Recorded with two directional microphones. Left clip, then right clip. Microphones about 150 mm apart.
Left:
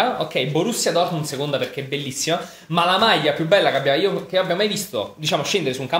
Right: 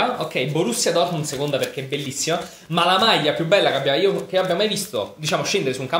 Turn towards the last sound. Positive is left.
turn(degrees=10)  # may be behind; listen again after turning